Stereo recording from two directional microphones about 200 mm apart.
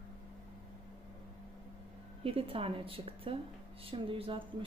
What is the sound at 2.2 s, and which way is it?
A woman's voice, 30° right (ahead or behind).